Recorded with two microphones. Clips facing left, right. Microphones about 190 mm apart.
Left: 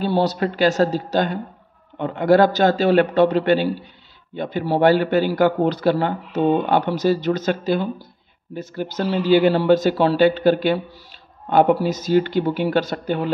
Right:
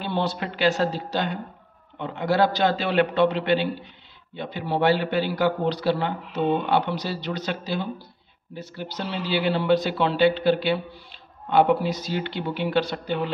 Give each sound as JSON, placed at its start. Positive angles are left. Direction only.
{"t": 0.0, "sound": "a man's voice", "side_deg": 40}